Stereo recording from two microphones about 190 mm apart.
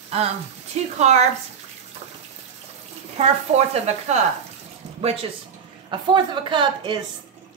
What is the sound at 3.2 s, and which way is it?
Speech, 35° right (ahead or behind).